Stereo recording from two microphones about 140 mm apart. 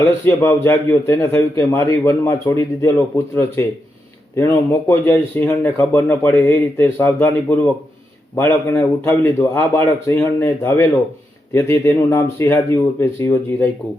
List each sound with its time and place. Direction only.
0.0 s a man's voice: 20° left (ahead or behind)